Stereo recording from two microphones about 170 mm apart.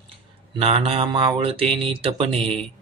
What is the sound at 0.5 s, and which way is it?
Speech, 35° right (ahead or behind).